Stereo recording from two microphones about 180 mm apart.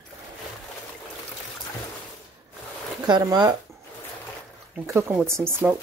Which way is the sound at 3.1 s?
25° right (ahead or behind).